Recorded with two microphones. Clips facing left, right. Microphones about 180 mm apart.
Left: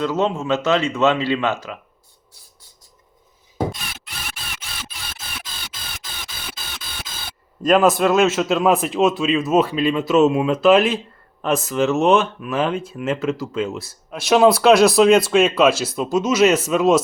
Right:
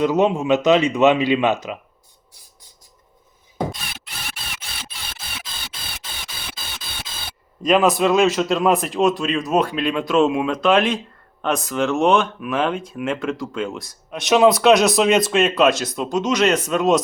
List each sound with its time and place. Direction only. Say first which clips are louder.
0.0 s speech: right 3 dB; 15° right (ahead or behind)
7.6 s speech: left 1 dB; centre (ahead or behind)